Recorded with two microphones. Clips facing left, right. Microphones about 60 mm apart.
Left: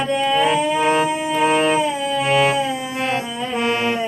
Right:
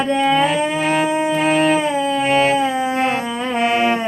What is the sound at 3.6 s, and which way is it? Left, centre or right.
Music, centre.